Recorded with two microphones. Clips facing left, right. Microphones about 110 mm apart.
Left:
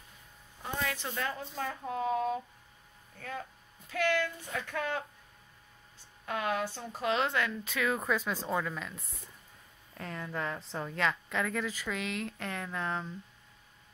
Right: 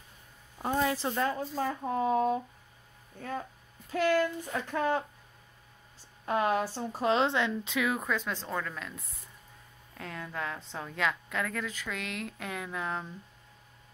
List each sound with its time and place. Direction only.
0.6 s a sound: 40° right (ahead or behind)
0.8 s speech: 30° right (ahead or behind)
6.2 s speech: 35° right (ahead or behind); by 8.0 s 15° right (ahead or behind)
8.0 s a woman's voice: 5° left (ahead or behind)